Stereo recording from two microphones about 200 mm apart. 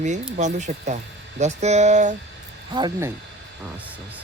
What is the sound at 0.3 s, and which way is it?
Speech, 35° right (ahead or behind).